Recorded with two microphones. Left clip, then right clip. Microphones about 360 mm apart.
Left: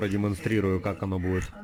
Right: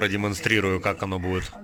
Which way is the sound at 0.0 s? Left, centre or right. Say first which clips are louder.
Right 5 dB; right.